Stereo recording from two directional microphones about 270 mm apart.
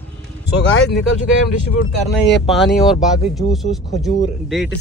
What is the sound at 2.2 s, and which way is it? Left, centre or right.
Speech, centre.